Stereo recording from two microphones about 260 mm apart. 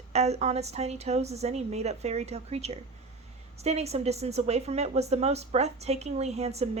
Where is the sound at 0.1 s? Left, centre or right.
Right.